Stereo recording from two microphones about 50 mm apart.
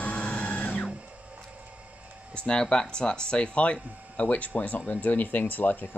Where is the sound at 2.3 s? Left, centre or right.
Centre.